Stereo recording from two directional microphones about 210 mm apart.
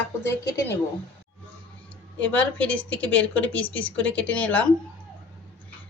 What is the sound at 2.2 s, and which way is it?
A woman's voice, 5° left (ahead or behind).